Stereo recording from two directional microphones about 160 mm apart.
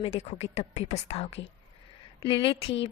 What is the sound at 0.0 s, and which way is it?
A woman's voice, 40° left (ahead or behind).